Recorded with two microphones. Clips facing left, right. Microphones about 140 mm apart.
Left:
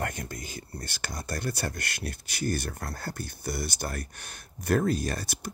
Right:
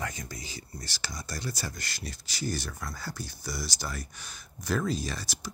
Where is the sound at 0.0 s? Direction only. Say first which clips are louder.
Left 3 dB; 55° left (ahead or behind).